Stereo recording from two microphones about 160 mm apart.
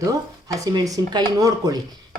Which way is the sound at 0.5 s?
20° right (ahead or behind).